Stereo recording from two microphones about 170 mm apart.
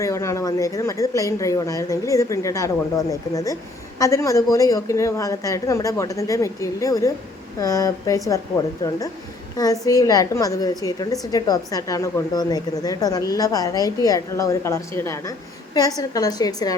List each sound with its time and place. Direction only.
0.0 s speech: 15° left (ahead or behind)